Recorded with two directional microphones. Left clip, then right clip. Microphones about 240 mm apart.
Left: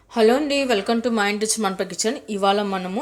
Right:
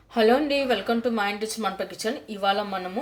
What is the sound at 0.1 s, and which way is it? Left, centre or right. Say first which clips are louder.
A woman's voice: left 3 dB; centre.